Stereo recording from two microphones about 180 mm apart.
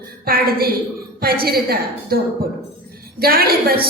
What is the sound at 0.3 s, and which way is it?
A woman's voice, 55° right (ahead or behind).